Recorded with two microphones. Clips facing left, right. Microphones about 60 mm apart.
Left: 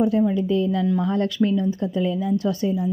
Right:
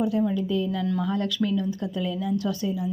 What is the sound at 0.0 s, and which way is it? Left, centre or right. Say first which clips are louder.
A woman's voice: left 5 dB; left.